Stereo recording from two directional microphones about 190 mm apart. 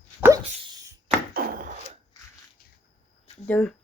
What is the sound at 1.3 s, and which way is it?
Chopping, 50° right (ahead or behind).